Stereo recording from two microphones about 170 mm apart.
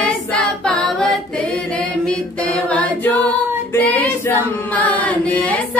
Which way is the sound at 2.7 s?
10° left (ahead or behind).